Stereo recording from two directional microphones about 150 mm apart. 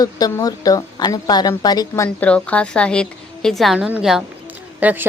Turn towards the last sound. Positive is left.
turn(degrees=-10)  # may be behind; listen again after turning